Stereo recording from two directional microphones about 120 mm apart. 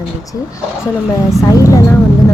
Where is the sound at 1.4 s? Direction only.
25° left (ahead or behind).